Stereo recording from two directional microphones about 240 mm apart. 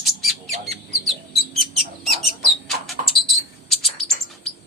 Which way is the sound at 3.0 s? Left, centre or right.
Right.